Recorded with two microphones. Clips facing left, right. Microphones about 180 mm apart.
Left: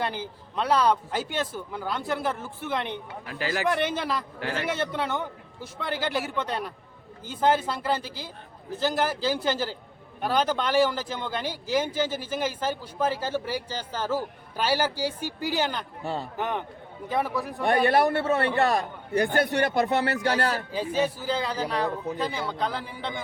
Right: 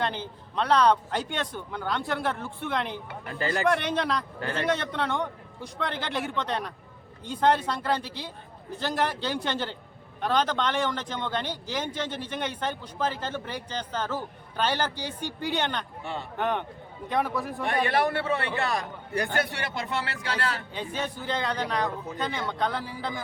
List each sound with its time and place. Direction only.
0.0 s a man's voice: 10° left (ahead or behind)
17.8 s speech: 45° left (ahead or behind)
19.1 s a man's voice: 25° left (ahead or behind)
19.4 s speech: 45° left (ahead or behind)
21.0 s a man's voice: 5° left (ahead or behind)